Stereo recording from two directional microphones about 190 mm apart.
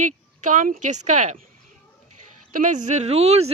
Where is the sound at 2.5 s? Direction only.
40° right (ahead or behind).